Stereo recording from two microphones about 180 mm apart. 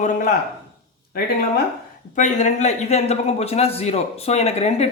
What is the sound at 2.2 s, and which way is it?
A man's voice, 45° left (ahead or behind).